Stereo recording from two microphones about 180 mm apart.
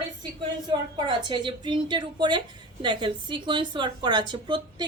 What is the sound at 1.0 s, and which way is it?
A woman's voice, 25° right (ahead or behind).